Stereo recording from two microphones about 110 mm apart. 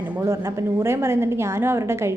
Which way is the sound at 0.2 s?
25° right (ahead or behind).